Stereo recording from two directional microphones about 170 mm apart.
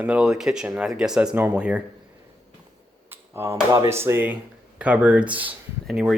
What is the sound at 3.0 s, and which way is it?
Speech, 15° right (ahead or behind).